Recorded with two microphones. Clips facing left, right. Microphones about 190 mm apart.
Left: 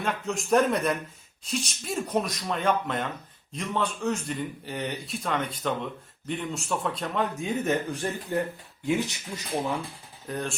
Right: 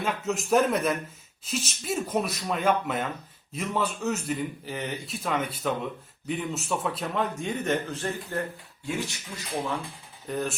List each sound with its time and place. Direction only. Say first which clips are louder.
0.0 s a man's voice: right 1 dB; 5° right (ahead or behind); by 9.4 s 20° left (ahead or behind)
10.2 s a man's voice: right 2 dB; centre (ahead or behind)